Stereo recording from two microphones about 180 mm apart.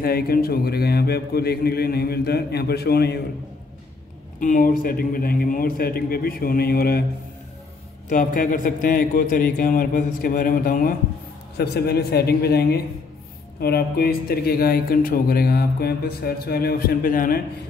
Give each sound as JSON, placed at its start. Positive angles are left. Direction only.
{"t": 0.0, "sound": "speech", "side_deg": 55}
{"t": 4.4, "sound": "speech", "side_deg": 45}
{"t": 8.1, "sound": "a man's voice", "side_deg": 50}
{"t": 11.5, "sound": "speech", "side_deg": 65}